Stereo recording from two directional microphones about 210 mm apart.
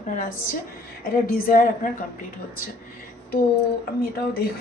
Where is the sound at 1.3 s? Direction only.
45° left (ahead or behind).